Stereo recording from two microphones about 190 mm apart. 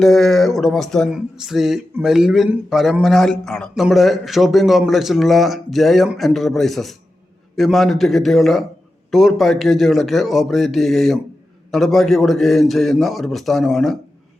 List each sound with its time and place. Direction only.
0.0 s speech: centre (ahead or behind)